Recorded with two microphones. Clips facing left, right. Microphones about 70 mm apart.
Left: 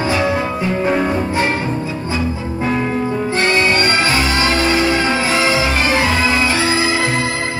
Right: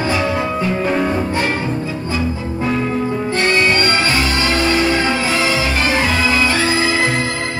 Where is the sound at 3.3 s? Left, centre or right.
Centre.